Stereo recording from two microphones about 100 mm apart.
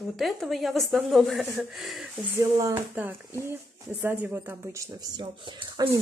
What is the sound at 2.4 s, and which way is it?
Speech, 35° right (ahead or behind).